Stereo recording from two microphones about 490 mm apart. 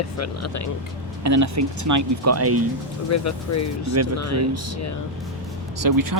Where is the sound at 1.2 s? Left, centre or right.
Right.